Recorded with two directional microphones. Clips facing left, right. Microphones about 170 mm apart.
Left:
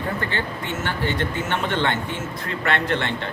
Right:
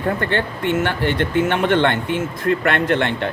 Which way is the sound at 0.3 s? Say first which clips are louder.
Right 7 dB; 60° right (ahead or behind).